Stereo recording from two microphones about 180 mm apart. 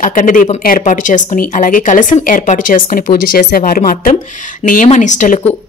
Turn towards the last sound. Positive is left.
turn(degrees=45)  # may be behind; listen again after turning